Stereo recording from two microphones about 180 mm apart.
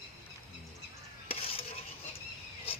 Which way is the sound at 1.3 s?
30° left (ahead or behind).